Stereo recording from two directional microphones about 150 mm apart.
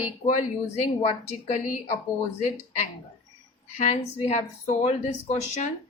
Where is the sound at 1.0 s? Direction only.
60° left (ahead or behind).